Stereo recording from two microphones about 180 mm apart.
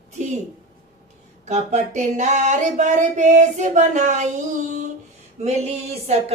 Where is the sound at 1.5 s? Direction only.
40° right (ahead or behind).